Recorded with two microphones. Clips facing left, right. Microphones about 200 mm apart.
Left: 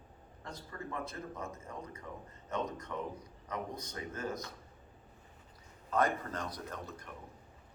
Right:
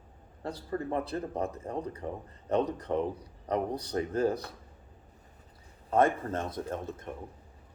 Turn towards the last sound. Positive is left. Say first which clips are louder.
# right 8 dB
turn(degrees=-25)  # may be behind; listen again after turning